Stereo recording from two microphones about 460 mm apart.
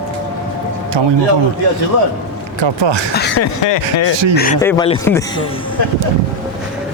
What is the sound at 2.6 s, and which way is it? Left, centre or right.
Speech, right.